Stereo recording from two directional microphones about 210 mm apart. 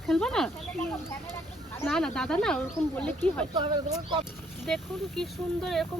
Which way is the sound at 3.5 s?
20° right (ahead or behind).